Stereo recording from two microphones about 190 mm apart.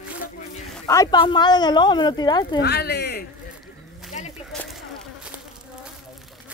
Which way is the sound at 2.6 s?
60° left (ahead or behind).